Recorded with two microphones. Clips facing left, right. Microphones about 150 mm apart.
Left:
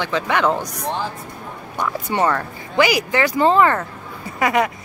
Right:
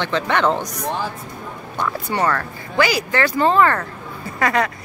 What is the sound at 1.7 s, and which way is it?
Speech, 15° left (ahead or behind).